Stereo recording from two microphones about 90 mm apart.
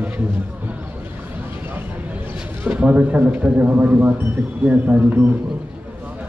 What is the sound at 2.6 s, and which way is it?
A man's voice, 15° right (ahead or behind).